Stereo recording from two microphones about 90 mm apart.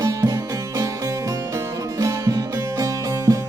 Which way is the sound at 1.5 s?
35° right (ahead or behind).